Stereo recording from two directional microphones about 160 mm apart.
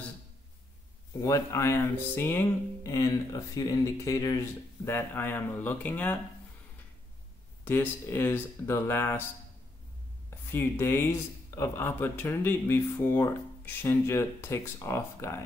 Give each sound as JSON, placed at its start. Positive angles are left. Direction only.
{"t": 1.2, "sound": "speech", "side_deg": 20}
{"t": 7.6, "sound": "speech", "side_deg": 15}
{"t": 10.5, "sound": "speech", "side_deg": 15}